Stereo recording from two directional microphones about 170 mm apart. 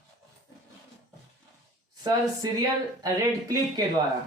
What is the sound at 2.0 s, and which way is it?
Speech, 20° right (ahead or behind).